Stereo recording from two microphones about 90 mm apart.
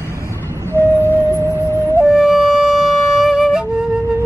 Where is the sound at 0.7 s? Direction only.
30° right (ahead or behind).